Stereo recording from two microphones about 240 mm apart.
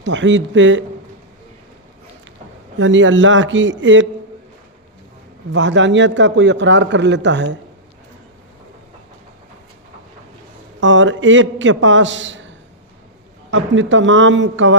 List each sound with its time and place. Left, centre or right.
0.0 s a man's voice: right
2.7 s a man's voice: right
5.5 s a man's voice: right
10.8 s a man's voice: right
13.5 s a man's voice: right